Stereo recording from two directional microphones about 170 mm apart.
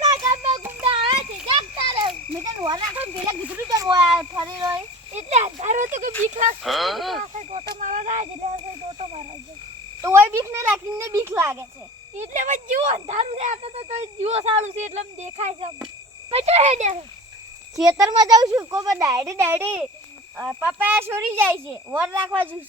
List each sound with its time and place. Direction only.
0.0 s child singing: 20° right (ahead or behind)
0.6 s child singing: 10° right (ahead or behind)
0.9 s children playing: 30° right (ahead or behind)
3.0 s a sound: 10° right (ahead or behind)
3.7 s a sound: 20° right (ahead or behind)
4.2 s child singing: 25° right (ahead or behind)
5.1 s a sound: 40° right (ahead or behind)
6.6 s speech: centre (ahead or behind)
7.7 s cricket: 50° right (ahead or behind)
10.0 s a sound: 15° right (ahead or behind)
12.1 s speech: 45° right (ahead or behind)
17.8 s a child's voice: 20° right (ahead or behind)